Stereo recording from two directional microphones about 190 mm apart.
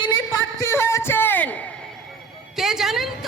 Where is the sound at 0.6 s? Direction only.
15° left (ahead or behind).